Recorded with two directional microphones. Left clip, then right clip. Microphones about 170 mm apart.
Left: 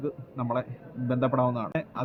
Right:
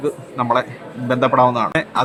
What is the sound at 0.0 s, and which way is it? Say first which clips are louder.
Speech: right 12 dB; 15° right (ahead or behind).